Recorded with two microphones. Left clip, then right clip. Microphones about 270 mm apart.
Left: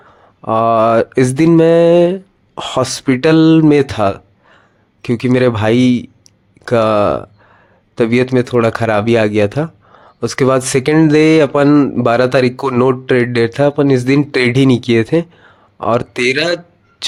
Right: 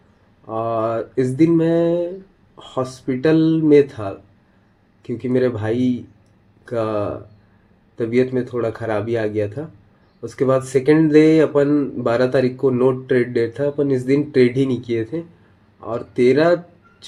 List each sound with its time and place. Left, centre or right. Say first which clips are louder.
0.4 s speech: left 10 dB; left